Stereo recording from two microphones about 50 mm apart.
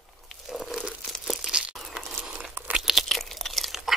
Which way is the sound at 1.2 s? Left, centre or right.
Centre.